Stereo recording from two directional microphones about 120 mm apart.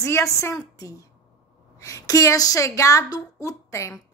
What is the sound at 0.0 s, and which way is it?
A woman's voice, 25° left (ahead or behind).